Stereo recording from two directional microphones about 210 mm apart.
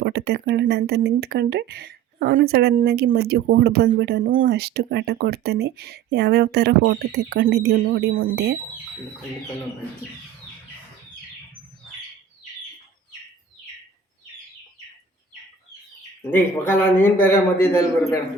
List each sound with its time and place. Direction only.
0.0 s speech: 50° right (ahead or behind)
16.3 s a man's voice: 10° left (ahead or behind)